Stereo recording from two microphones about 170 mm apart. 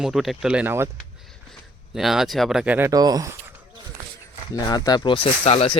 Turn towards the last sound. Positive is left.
turn(degrees=35)  # may be behind; listen again after turning